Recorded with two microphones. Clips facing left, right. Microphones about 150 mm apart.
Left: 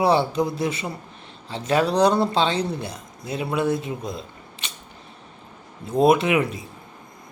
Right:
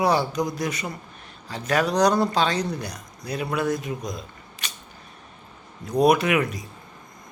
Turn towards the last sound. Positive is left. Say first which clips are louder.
# left 2 dB
turn(degrees=25)  # may be behind; listen again after turning